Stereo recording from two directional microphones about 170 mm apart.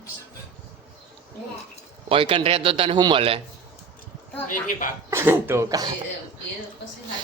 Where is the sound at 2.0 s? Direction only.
30° right (ahead or behind).